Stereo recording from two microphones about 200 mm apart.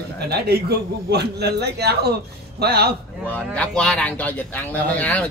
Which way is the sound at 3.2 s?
5° left (ahead or behind).